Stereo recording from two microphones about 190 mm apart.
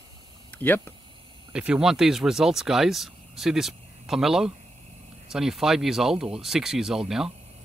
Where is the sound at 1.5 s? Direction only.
5° right (ahead or behind).